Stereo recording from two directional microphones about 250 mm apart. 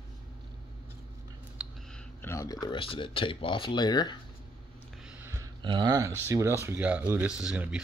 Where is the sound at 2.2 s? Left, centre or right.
Centre.